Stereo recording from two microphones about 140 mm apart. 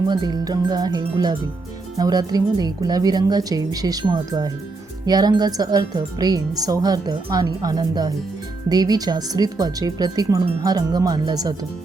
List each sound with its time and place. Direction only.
0.1 s speech: 30° right (ahead or behind)